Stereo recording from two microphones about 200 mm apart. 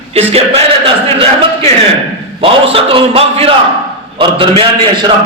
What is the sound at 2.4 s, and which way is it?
A man's voice, 25° right (ahead or behind).